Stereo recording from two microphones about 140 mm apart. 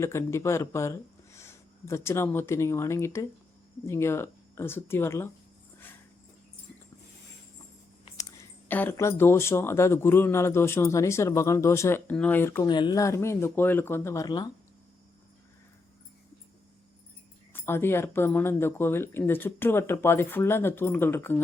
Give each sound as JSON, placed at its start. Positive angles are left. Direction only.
{"t": 0.0, "sound": "speech", "side_deg": 20}
{"t": 8.2, "sound": "speech", "side_deg": 20}
{"t": 12.6, "sound": "speech", "side_deg": 30}
{"t": 14.3, "sound": "speech", "side_deg": 30}
{"t": 17.5, "sound": "speech", "side_deg": 15}